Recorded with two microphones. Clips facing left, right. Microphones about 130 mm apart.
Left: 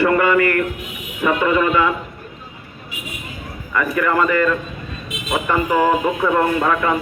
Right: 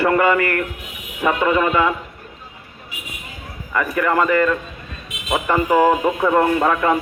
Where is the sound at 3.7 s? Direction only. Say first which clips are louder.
Even; 30° right (ahead or behind).